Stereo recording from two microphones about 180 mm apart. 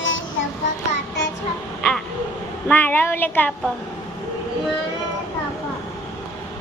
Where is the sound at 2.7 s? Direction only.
10° left (ahead or behind).